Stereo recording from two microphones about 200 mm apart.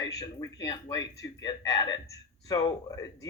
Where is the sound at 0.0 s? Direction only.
20° left (ahead or behind).